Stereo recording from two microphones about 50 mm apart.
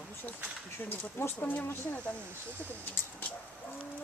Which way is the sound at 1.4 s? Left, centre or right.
Left.